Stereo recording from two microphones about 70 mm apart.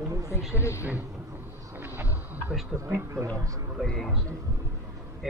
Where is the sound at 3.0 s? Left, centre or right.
Right.